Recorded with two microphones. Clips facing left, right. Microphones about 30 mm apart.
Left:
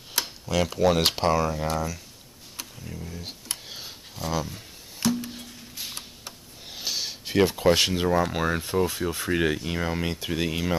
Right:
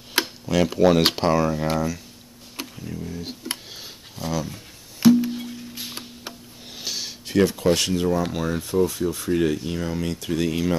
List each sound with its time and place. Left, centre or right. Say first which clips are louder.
0.2 s speech: right 4 dB; centre
2.5 s a sound: right 6 dB; centre
2.8 s speech: right 5 dB; centre
3.7 s a sound: even; centre
5.0 s music: right 10 dB; centre
6.7 s speech: even; centre